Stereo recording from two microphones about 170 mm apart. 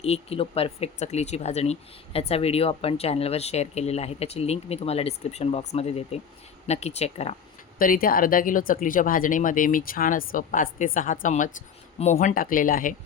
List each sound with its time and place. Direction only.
0.0 s speech: 35° left (ahead or behind)
7.8 s speech: 55° left (ahead or behind)